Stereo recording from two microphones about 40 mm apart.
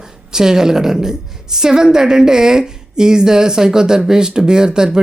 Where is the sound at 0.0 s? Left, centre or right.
Centre.